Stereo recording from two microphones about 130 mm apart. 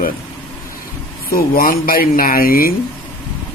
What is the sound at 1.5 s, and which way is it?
Speech, 90° left.